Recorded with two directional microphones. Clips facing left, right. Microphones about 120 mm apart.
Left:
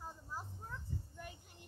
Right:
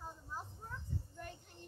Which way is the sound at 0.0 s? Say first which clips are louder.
Even; 5° left (ahead or behind).